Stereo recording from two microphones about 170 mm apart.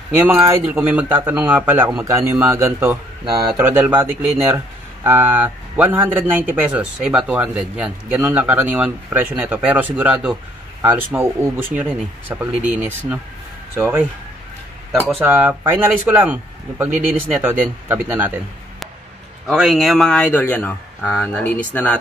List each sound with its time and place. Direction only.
0.2 s speech: 15° right (ahead or behind)
15.1 s speech: 10° right (ahead or behind)
19.4 s speech: 5° right (ahead or behind)